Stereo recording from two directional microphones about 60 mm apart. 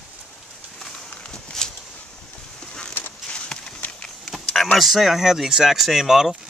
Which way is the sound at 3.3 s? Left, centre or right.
Centre.